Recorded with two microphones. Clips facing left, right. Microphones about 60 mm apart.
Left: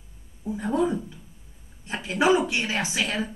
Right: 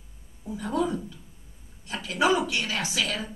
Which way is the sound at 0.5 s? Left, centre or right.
Left.